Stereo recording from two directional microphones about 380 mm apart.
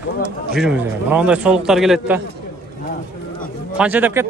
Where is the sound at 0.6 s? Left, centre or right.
Centre.